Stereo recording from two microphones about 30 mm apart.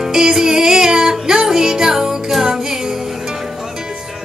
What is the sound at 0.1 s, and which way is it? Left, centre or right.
Music, centre.